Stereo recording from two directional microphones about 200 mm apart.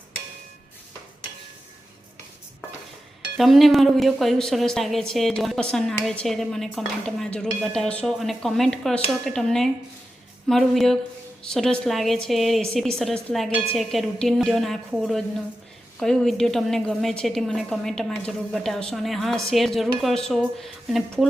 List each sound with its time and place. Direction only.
3.3 s a woman's voice: centre (ahead or behind)